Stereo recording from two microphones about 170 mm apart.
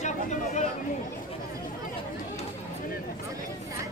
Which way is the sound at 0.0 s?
45° left (ahead or behind).